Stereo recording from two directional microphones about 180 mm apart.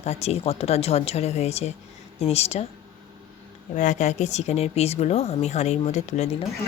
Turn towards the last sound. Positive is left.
turn(degrees=40)  # may be behind; listen again after turning